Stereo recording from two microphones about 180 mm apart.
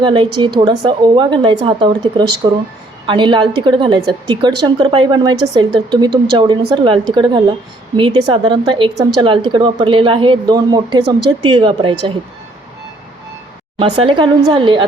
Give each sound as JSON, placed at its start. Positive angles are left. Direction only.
{"t": 0.0, "sound": "a woman's voice", "side_deg": -25}
{"t": 13.7, "sound": "a woman's voice", "side_deg": -30}